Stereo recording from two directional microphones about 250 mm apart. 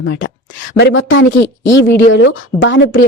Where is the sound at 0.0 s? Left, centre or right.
Left.